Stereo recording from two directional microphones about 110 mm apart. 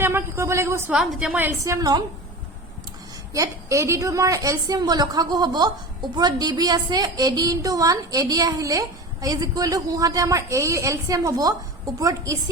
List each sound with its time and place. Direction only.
0.0 s speech: 20° right (ahead or behind)
0.9 s a woman's voice: 10° right (ahead or behind)
1.6 s a woman's voice: 30° right (ahead or behind)
3.3 s a woman's voice: 30° right (ahead or behind)